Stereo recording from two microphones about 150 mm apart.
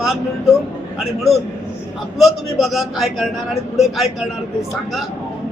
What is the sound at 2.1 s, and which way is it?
A man's voice, centre (ahead or behind).